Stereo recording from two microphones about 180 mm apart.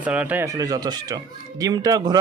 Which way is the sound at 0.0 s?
10° right (ahead or behind).